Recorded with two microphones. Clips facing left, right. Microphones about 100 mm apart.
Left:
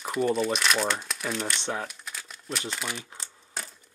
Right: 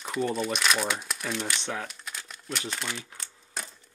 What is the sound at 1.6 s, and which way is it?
Speech, 30° left (ahead or behind).